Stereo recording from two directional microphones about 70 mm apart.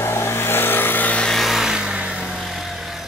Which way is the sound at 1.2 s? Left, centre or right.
Centre.